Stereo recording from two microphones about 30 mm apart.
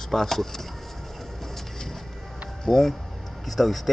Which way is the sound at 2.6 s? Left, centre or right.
Centre.